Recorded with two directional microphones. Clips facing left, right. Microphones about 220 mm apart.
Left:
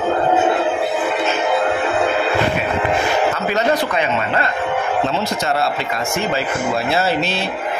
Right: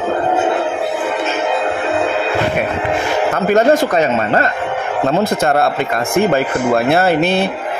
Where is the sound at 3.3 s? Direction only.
50° right (ahead or behind).